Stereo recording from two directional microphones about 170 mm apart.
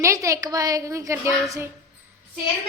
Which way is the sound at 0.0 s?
20° right (ahead or behind).